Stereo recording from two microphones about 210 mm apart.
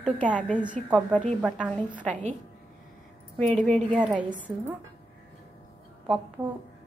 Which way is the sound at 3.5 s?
5° left (ahead or behind).